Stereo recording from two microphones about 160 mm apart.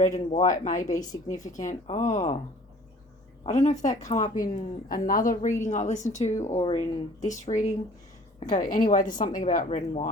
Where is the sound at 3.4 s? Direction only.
45° left (ahead or behind).